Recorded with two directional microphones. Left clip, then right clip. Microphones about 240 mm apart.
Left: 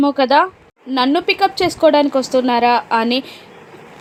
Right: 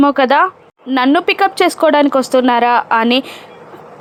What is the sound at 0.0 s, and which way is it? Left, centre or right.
A woman's voice, centre.